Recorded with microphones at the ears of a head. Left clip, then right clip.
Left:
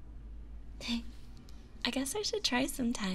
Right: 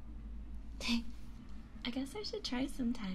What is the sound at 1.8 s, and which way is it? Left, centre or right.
Speech, left.